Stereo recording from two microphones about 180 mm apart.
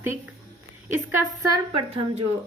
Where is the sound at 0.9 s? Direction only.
15° right (ahead or behind).